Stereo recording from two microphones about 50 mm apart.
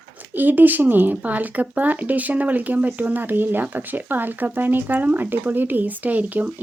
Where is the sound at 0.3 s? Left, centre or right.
Right.